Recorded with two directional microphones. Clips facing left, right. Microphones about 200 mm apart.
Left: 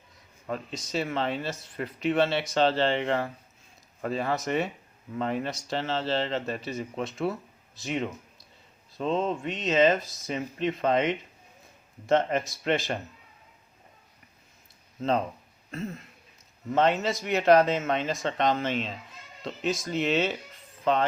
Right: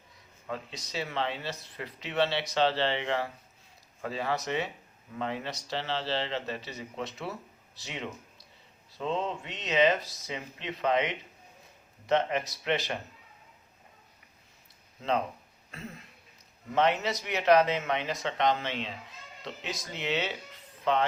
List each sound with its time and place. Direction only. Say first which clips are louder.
0.4 s speech: left 4 dB; 45° left (ahead or behind)
16.7 s speech: left 3 dB; 50° left (ahead or behind)